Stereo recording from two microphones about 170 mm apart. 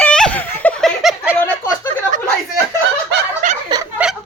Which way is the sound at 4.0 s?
10° right (ahead or behind).